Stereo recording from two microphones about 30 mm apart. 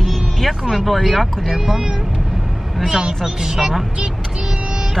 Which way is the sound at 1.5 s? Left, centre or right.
Centre.